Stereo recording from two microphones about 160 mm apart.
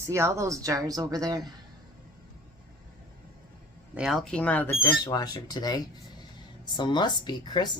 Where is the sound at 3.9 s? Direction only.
5° right (ahead or behind).